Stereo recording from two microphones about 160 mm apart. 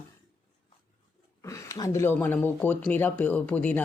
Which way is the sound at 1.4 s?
20° left (ahead or behind).